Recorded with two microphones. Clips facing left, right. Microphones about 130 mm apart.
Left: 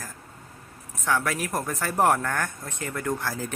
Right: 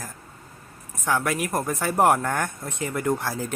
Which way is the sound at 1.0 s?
10° right (ahead or behind).